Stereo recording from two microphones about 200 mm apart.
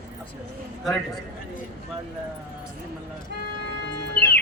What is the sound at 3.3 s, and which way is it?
Vehicle, 55° right (ahead or behind).